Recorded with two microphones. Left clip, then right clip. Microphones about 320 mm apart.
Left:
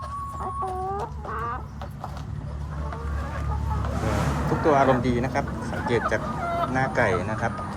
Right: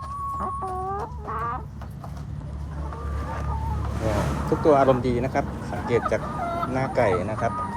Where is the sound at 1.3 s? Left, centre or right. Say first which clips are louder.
Right 2 dB; right.